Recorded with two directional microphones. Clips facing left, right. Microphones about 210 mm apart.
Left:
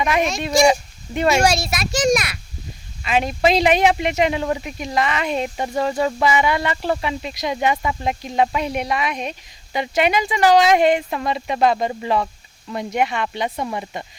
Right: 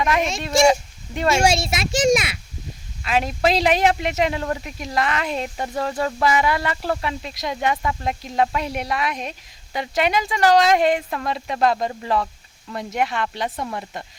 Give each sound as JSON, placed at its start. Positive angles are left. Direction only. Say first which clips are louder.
{"t": 0.0, "sound": "speech", "louder": "left 1 dB", "side_deg": 5}
{"t": 0.7, "sound": "a sound", "louder": "left 1 dB", "side_deg": 5}
{"t": 1.4, "sound": "a child's voice", "louder": "left 1 dB", "side_deg": -25}
{"t": 3.0, "sound": "speech", "louder": "left 2 dB", "side_deg": 0}